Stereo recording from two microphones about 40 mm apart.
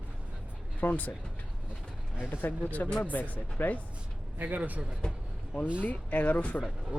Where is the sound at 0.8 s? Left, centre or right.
Left.